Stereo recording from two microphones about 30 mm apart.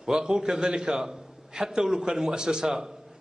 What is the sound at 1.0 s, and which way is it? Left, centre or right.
A man's voice, centre.